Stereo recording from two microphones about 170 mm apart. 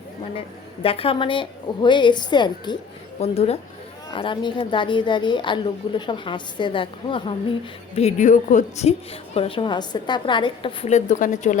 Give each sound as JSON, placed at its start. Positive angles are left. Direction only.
{"t": 0.3, "sound": "a woman's voice", "side_deg": 35}
{"t": 3.2, "sound": "a woman's voice", "side_deg": 35}
{"t": 7.9, "sound": "a woman's voice", "side_deg": 45}
{"t": 10.9, "sound": "a woman's voice", "side_deg": 45}